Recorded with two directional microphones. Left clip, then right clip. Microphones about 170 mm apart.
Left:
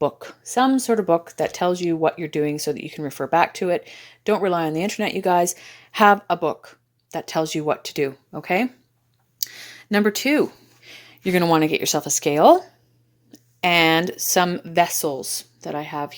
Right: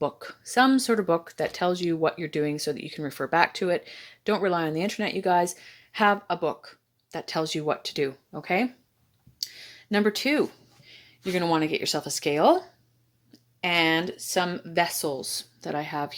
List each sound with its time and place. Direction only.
0.0 s speech: 20° left (ahead or behind)
0.5 s speech: 5° left (ahead or behind)
9.4 s clicking: 35° left (ahead or behind)
9.9 s speech: 20° left (ahead or behind)
10.8 s a sound: 40° left (ahead or behind)
11.8 s speech: 25° left (ahead or behind)
15.6 s speech: centre (ahead or behind)